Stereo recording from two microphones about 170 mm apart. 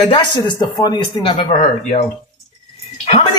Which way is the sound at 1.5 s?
40° left (ahead or behind).